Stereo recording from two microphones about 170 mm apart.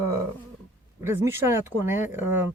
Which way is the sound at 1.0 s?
15° right (ahead or behind).